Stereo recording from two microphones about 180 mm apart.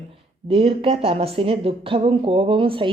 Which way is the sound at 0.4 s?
30° right (ahead or behind).